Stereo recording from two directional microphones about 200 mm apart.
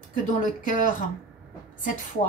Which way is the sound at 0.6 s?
40° left (ahead or behind).